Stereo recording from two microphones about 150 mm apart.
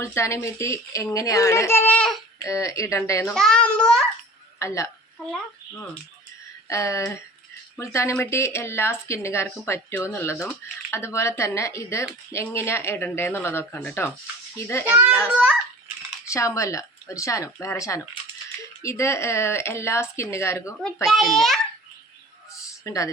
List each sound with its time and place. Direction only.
0.0 s a woman's voice: 20° left (ahead or behind)
2.4 s a woman's voice: 20° left (ahead or behind)
3.3 s a child's voice: 5° left (ahead or behind)
4.6 s a woman's voice: 20° left (ahead or behind)
6.7 s a woman's voice: 20° left (ahead or behind)
14.8 s a child's voice: 15° right (ahead or behind)
16.2 s a woman's voice: 20° left (ahead or behind)
21.1 s a child's voice: centre (ahead or behind)
22.8 s a woman's voice: 20° left (ahead or behind)